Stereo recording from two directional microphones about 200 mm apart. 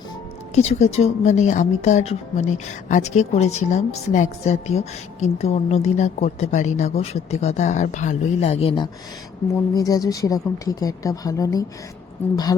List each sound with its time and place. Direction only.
0.5 s a woman's voice: 35° left (ahead or behind); by 11.6 s 15° left (ahead or behind)